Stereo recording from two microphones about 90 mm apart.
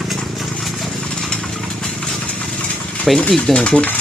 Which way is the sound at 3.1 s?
10° left (ahead or behind).